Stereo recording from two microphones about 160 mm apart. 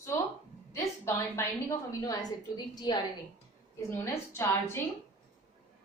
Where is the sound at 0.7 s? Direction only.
20° left (ahead or behind).